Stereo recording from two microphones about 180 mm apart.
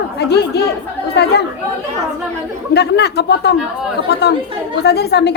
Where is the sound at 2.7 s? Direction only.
65° left (ahead or behind).